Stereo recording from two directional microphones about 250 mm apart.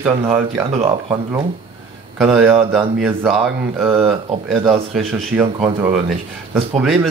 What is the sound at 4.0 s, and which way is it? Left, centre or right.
Speech, right.